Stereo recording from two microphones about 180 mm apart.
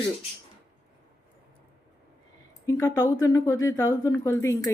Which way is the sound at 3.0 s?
20° left (ahead or behind).